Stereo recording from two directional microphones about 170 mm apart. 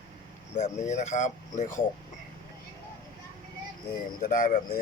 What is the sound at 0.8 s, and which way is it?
Speech, 45° left (ahead or behind).